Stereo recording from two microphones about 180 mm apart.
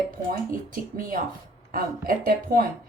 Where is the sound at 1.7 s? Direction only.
55° right (ahead or behind).